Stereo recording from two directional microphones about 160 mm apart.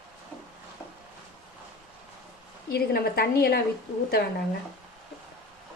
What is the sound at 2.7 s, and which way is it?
Speech, 80° left.